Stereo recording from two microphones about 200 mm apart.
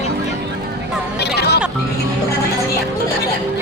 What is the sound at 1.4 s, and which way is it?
Speech, 55° left (ahead or behind).